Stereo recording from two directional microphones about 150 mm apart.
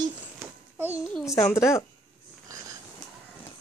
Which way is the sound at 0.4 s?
15° right (ahead or behind).